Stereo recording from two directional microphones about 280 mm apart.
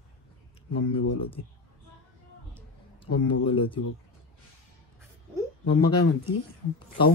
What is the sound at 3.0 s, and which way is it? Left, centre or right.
Speech, centre.